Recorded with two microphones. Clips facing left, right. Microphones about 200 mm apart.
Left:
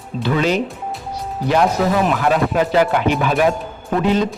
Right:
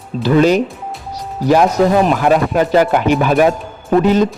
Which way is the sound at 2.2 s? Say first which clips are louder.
Right 3 dB; 45° right (ahead or behind).